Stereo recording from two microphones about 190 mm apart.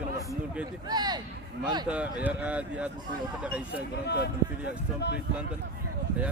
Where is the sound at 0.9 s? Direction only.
20° right (ahead or behind).